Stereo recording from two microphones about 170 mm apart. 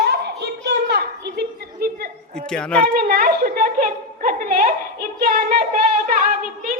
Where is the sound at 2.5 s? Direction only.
5° left (ahead or behind).